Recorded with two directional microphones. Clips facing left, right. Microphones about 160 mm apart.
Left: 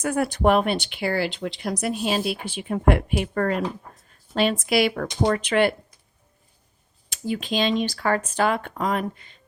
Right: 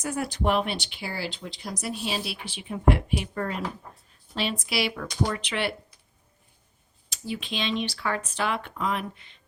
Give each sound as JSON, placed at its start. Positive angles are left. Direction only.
{"t": 0.0, "sound": "speech", "side_deg": 60}
{"t": 4.6, "sound": "speech", "side_deg": 50}
{"t": 7.1, "sound": "speech", "side_deg": 45}